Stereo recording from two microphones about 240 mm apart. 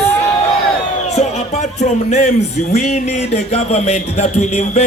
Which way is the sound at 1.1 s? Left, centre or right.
Left.